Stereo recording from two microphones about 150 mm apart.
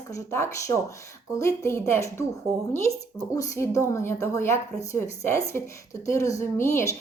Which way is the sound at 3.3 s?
20° left (ahead or behind).